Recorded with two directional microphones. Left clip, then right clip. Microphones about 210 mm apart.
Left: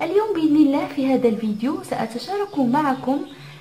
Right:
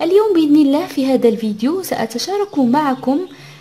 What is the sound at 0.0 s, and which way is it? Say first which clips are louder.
A woman's voice: right 7 dB; 45° right (ahead or behind).